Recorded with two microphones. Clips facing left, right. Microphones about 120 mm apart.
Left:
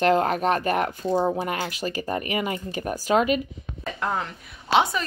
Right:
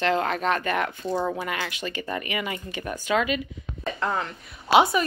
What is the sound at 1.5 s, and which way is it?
Speech, 40° left (ahead or behind).